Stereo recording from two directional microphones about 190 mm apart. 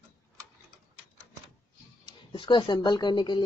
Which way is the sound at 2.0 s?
25° left (ahead or behind).